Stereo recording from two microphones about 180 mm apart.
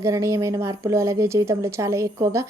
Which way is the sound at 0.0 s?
15° right (ahead or behind).